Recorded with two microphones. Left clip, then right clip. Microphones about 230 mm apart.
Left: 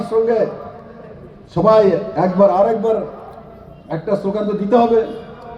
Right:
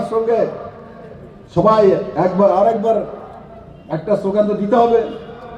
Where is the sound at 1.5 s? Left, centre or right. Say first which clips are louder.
Even; left.